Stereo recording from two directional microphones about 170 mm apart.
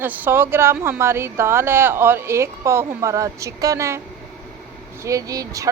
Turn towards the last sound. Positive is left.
turn(degrees=-20)  # may be behind; listen again after turning